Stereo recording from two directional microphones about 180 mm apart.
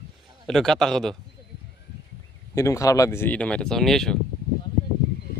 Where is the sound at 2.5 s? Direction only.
15° left (ahead or behind).